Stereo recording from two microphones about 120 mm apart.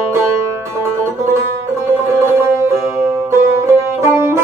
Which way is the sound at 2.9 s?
25° right (ahead or behind).